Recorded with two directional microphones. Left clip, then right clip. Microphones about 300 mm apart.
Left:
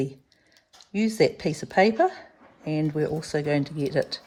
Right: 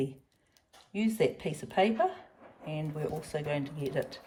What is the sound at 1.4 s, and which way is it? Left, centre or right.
Speech, centre.